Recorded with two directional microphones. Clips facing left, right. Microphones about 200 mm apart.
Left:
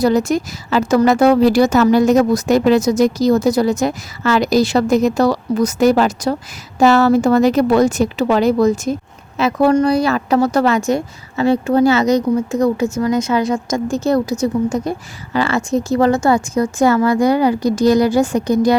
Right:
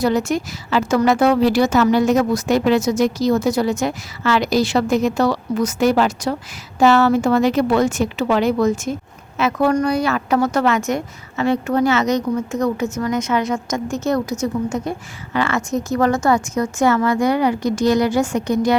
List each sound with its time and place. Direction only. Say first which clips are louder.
0.0 s a woman's voice: left 4 dB; 40° left (ahead or behind)